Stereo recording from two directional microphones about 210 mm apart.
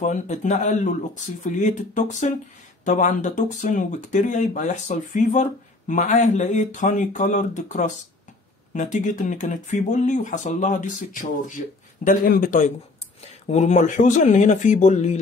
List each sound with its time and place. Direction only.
0.0 s speech: 35° left (ahead or behind)